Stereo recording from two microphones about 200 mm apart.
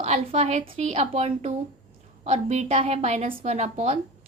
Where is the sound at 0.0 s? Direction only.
30° right (ahead or behind).